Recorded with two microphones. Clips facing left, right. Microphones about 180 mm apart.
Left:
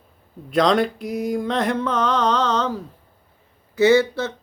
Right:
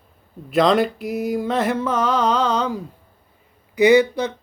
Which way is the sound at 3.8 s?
15° right (ahead or behind).